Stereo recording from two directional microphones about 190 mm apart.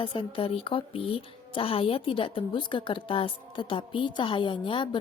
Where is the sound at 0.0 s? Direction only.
25° left (ahead or behind).